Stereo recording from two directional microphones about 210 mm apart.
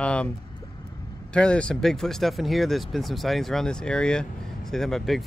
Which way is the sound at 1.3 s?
5° left (ahead or behind).